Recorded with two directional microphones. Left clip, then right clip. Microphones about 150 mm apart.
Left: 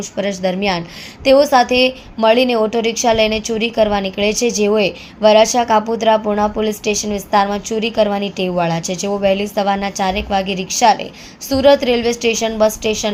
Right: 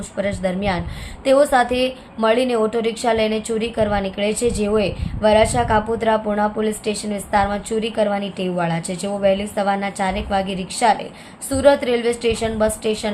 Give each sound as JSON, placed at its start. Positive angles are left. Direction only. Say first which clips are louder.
{"t": 0.2, "sound": "a woman's voice", "louder": "left 4 dB", "side_deg": 20}